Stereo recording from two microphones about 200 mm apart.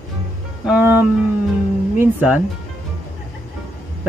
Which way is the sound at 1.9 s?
10° right (ahead or behind).